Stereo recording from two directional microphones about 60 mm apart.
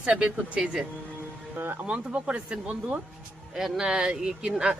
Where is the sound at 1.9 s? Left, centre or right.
Centre.